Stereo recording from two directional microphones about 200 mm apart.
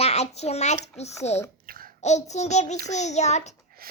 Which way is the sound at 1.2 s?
35° left (ahead or behind).